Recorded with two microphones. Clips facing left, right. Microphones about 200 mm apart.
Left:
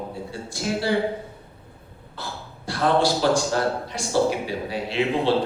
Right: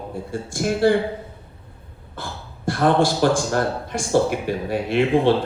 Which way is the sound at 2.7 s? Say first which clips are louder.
Right 3 dB; 50° right (ahead or behind).